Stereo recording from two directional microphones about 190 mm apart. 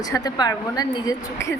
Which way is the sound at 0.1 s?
20° left (ahead or behind).